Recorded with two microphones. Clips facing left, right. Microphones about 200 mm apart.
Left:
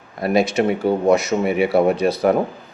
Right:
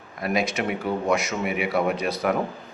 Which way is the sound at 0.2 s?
30° left (ahead or behind).